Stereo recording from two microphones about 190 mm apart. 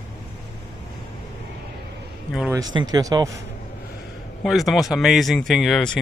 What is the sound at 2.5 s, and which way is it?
Speech, 20° right (ahead or behind).